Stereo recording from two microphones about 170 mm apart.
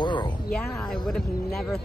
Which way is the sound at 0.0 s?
25° left (ahead or behind).